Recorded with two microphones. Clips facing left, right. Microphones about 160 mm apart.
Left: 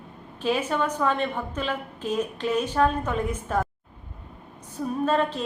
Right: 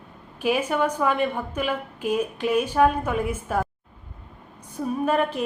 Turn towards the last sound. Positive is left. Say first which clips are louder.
# right 1 dB
turn(degrees=-10)  # may be behind; listen again after turning